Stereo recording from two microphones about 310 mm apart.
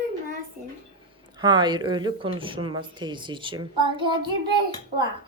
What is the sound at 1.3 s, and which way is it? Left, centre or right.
A woman's voice, centre.